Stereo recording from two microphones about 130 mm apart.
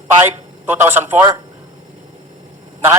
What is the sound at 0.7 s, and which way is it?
Speech, 15° right (ahead or behind).